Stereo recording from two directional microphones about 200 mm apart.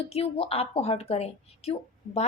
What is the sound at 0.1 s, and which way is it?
A woman's voice, 30° left (ahead or behind).